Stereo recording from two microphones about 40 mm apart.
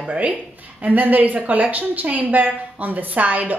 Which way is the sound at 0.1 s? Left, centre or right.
Right.